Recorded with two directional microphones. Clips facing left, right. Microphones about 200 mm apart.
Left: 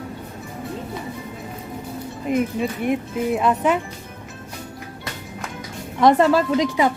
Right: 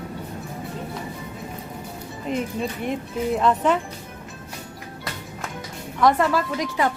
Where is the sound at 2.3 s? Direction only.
5° left (ahead or behind).